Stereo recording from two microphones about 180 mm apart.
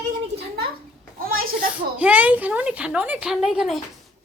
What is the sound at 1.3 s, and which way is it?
Speech, 55° right (ahead or behind).